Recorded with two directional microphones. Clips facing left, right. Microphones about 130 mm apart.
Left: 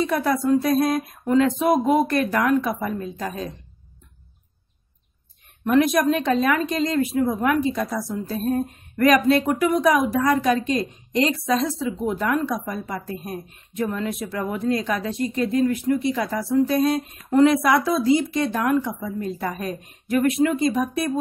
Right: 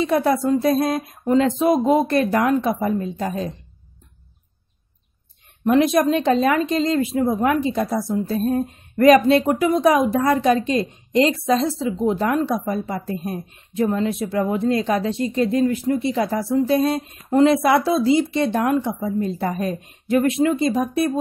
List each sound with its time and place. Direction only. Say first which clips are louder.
0.0 s speech: right 3 dB; 25° right (ahead or behind)
5.6 s speech: right 2 dB; 25° right (ahead or behind)